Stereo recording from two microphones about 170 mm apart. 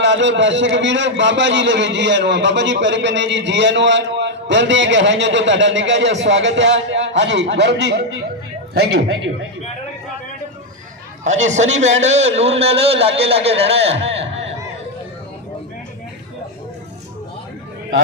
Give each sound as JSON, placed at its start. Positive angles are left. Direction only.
{"t": 0.0, "sound": "a man's voice", "side_deg": -90}
{"t": 8.7, "sound": "speech", "side_deg": -70}
{"t": 11.2, "sound": "a man's voice", "side_deg": -45}